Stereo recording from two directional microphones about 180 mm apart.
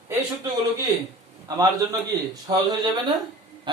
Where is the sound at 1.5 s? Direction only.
20° right (ahead or behind).